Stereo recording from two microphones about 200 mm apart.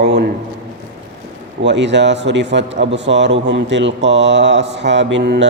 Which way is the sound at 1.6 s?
60° right (ahead or behind).